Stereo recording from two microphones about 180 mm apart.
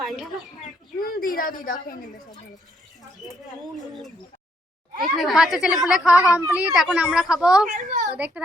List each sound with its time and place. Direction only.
0.9 s a sound: 55° left (ahead or behind)
3.8 s speech: centre (ahead or behind)
5.1 s speech: centre (ahead or behind)
7.7 s a child's voice: 45° right (ahead or behind)
8.1 s a child's voice: 5° right (ahead or behind)